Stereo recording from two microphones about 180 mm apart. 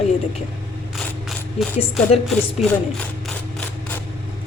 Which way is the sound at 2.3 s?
5° left (ahead or behind).